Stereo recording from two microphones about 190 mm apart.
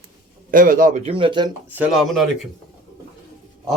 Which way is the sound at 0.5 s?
45° right (ahead or behind).